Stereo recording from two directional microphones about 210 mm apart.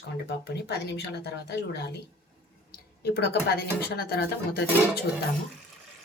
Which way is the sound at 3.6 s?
50° left (ahead or behind).